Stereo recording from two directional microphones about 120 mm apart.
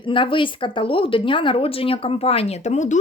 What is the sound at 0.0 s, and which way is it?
A woman's voice, 45° left (ahead or behind).